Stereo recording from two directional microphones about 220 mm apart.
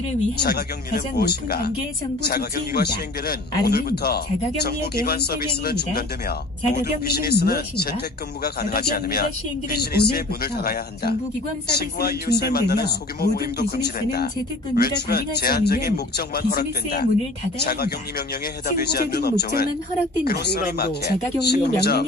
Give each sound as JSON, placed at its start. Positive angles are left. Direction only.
{"t": 0.4, "sound": "a man's voice", "side_deg": 45}